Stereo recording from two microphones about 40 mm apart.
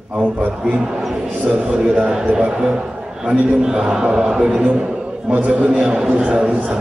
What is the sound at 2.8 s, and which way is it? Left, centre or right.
Speech, centre.